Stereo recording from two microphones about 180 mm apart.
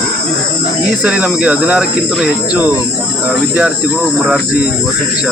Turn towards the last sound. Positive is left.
turn(degrees=-10)  # may be behind; listen again after turning